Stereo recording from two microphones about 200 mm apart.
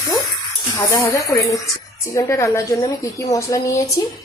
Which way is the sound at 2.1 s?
15° left (ahead or behind).